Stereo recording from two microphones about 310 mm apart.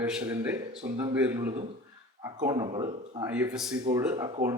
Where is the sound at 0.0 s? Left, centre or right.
Centre.